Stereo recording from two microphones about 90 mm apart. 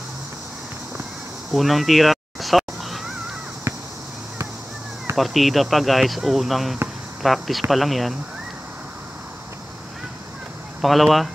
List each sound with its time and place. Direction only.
1.5 s a sound: centre (ahead or behind)
5.1 s speech: centre (ahead or behind)
10.8 s speech: centre (ahead or behind)